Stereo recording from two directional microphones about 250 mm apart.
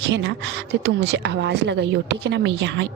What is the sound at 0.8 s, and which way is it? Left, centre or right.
A woman's voice, right.